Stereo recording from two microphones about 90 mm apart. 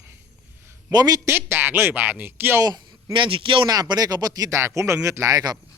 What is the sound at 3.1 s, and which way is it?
Speech, 70° right (ahead or behind).